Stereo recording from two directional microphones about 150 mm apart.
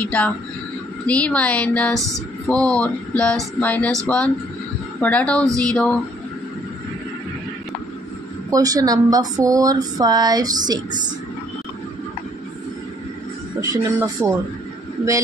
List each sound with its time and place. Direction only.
0.0 s speech: 10° left (ahead or behind)
5.0 s speech: 10° left (ahead or behind)
8.5 s speech: 25° right (ahead or behind)
13.6 s speech: 20° right (ahead or behind)